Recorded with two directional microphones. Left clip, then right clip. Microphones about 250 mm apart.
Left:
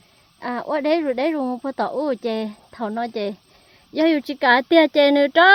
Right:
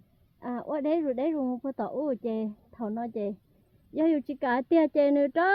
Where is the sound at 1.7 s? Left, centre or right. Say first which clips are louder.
Left 10 dB; centre.